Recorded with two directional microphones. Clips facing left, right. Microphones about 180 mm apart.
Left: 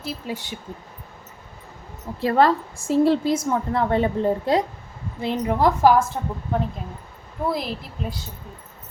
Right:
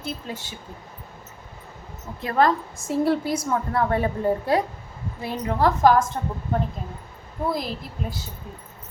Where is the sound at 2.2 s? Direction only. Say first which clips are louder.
Left 3 dB; 30° left (ahead or behind); by 6.2 s 5° left (ahead or behind).